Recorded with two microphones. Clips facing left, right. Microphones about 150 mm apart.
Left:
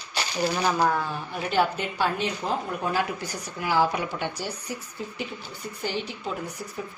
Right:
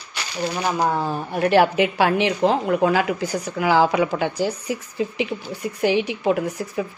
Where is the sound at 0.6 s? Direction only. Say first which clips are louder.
Right 3 dB; 15° right (ahead or behind).